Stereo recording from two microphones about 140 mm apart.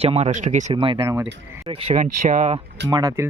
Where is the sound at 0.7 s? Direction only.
40° right (ahead or behind).